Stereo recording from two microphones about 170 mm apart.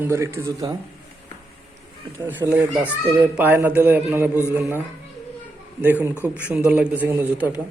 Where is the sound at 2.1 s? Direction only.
10° right (ahead or behind).